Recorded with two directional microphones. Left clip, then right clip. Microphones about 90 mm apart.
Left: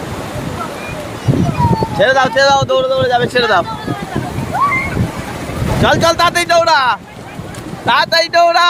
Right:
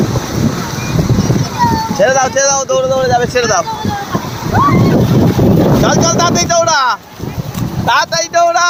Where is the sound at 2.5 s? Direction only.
30° left (ahead or behind).